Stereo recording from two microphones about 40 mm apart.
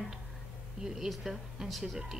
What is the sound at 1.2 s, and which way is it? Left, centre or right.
Speech, centre.